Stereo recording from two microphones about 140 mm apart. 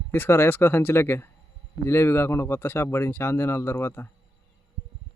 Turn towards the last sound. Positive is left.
turn(degrees=15)  # may be behind; listen again after turning